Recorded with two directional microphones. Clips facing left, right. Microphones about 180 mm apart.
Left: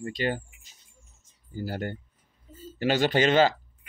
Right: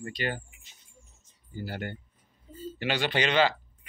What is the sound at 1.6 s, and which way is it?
Speech, 40° left (ahead or behind).